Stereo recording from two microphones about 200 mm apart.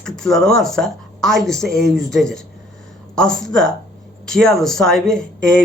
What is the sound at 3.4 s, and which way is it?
Speech, centre (ahead or behind).